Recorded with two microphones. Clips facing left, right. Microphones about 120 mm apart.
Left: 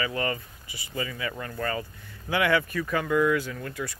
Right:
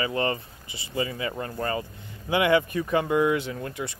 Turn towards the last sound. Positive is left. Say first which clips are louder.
# right 2 dB
turn(degrees=-25)  # may be behind; listen again after turning